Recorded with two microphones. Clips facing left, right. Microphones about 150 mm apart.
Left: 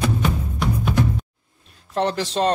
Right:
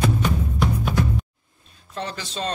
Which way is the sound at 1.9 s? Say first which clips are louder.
Left 9 dB; 75° left (ahead or behind).